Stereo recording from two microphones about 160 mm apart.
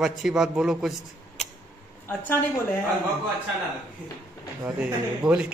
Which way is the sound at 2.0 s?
15° left (ahead or behind).